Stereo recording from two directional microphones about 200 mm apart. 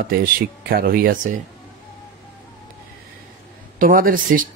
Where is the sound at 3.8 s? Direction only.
45° right (ahead or behind).